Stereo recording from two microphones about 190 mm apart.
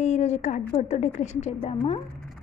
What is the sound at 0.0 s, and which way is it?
A woman's voice, 35° left (ahead or behind).